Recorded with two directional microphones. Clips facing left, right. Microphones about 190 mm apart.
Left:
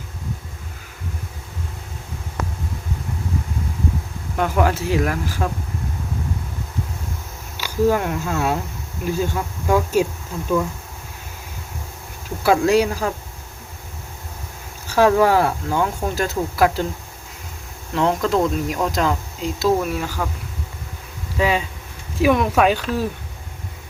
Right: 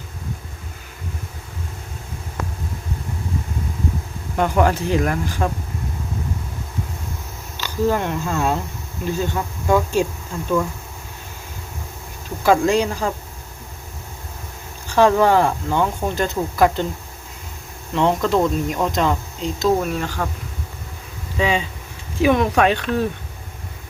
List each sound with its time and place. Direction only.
4.4 s speech: 5° left (ahead or behind)
7.5 s speech: 10° left (ahead or behind)
12.4 s speech: 5° left (ahead or behind)
14.9 s speech: 5° left (ahead or behind)
17.9 s speech: centre (ahead or behind)
21.3 s speech: 5° left (ahead or behind)